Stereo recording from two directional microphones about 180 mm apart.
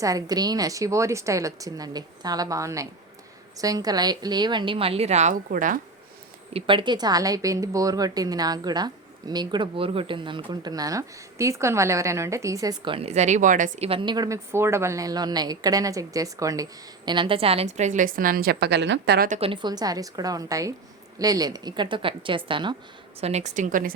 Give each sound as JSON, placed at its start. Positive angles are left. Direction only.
{"t": 0.0, "sound": "a woman's voice", "side_deg": -20}
{"t": 6.5, "sound": "a woman's voice", "side_deg": -30}
{"t": 19.3, "sound": "a woman's voice", "side_deg": -30}
{"t": 23.2, "sound": "a woman's voice", "side_deg": -40}